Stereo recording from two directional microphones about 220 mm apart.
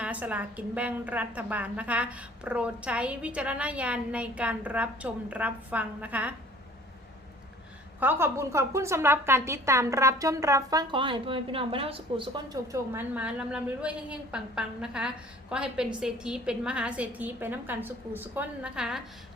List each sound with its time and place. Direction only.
0.0 s a woman's voice: 5° right (ahead or behind)
7.9 s a woman's voice: 10° right (ahead or behind)
12.7 s a woman's voice: 10° right (ahead or behind)